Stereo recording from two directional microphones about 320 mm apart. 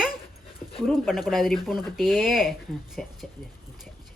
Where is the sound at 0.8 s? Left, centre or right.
Centre.